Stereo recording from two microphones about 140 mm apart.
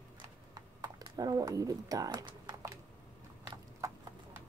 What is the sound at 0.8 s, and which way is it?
Speech, 30° right (ahead or behind).